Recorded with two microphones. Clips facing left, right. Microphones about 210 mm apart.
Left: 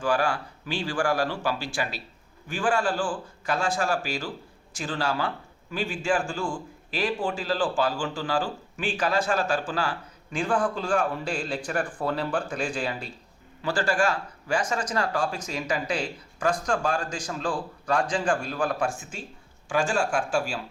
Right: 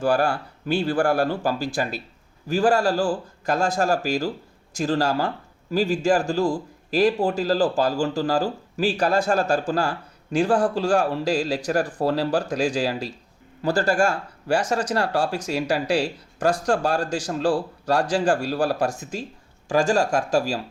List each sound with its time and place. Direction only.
0.0 s a man's voice: 40° right (ahead or behind)
0.8 s speech: 60° right (ahead or behind)
1.3 s a man's voice: 40° right (ahead or behind)
14.5 s speech: 70° right (ahead or behind)
16.0 s a man's voice: 35° right (ahead or behind)